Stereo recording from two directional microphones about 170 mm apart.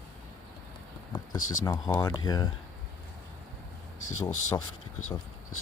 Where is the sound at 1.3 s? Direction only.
20° left (ahead or behind).